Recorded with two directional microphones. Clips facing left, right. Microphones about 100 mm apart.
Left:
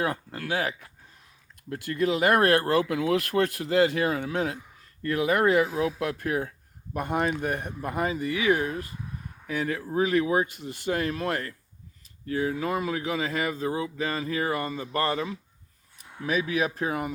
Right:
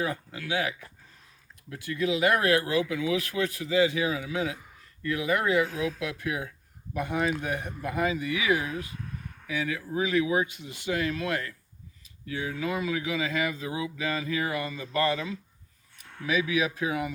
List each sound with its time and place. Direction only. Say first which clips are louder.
0.0 s speech: left 2 dB; 55° left (ahead or behind)
1.7 s speech: left 2 dB; 50° left (ahead or behind)